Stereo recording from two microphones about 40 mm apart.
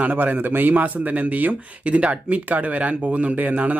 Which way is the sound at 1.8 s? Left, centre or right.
Right.